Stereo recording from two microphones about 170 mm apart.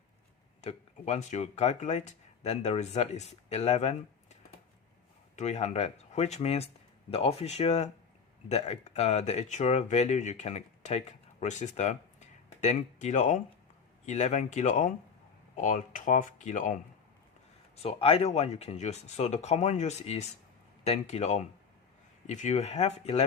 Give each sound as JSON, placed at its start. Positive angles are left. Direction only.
{"t": 0.6, "sound": "speech", "side_deg": 40}
{"t": 5.4, "sound": "speech", "side_deg": 40}
{"t": 17.8, "sound": "speech", "side_deg": 35}